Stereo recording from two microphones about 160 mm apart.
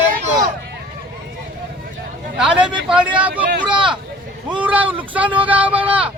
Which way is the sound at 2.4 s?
5° right (ahead or behind).